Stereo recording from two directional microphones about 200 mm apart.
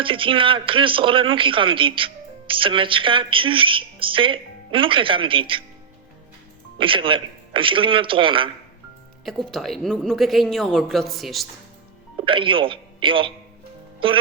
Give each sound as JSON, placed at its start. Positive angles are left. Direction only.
{"t": 0.0, "sound": "speech", "side_deg": -25}
{"t": 6.7, "sound": "speech", "side_deg": -25}
{"t": 9.2, "sound": "a woman's voice", "side_deg": 0}
{"t": 12.2, "sound": "speech", "side_deg": -25}